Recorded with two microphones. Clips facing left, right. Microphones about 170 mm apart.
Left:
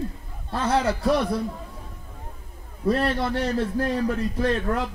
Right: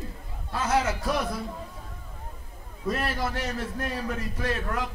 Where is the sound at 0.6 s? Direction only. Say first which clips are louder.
Left 4 dB; 30° left (ahead or behind).